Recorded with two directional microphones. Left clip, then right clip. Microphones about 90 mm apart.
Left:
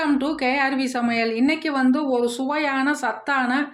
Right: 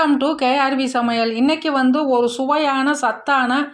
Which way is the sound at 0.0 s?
10° right (ahead or behind).